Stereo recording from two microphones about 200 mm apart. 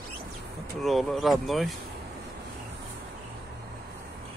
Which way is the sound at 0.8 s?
Centre (ahead or behind).